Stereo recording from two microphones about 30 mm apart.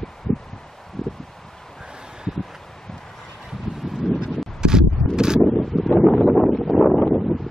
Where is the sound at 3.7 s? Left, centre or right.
Centre.